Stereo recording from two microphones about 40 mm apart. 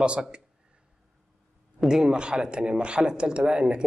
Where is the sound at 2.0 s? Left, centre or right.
Right.